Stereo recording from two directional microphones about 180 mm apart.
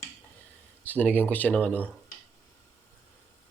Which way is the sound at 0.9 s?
10° left (ahead or behind).